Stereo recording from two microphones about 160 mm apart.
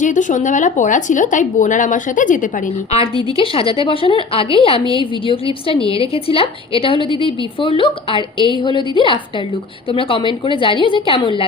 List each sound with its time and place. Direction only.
0.0 s speech: 50° left (ahead or behind)
3.3 s a woman's voice: 35° left (ahead or behind)